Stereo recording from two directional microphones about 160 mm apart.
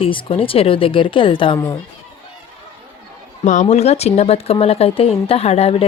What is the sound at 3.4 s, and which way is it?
Speech, 50° left (ahead or behind).